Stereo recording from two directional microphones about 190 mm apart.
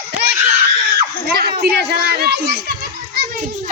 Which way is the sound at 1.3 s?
55° right (ahead or behind).